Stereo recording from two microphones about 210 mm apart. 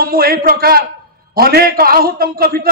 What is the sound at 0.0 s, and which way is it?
A man's voice, 45° right (ahead or behind).